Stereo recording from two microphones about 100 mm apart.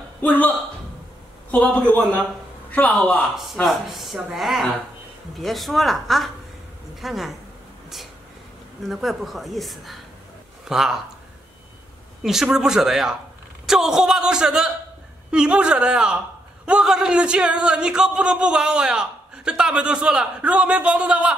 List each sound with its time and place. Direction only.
0.2 s speech: 15° left (ahead or behind)
1.5 s a man's voice: 15° left (ahead or behind)
3.3 s speech: centre (ahead or behind)
8.8 s speech: centre (ahead or behind)
12.2 s speech: 5° right (ahead or behind)